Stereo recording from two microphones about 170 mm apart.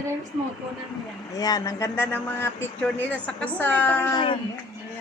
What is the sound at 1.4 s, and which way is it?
A man's voice, 20° left (ahead or behind).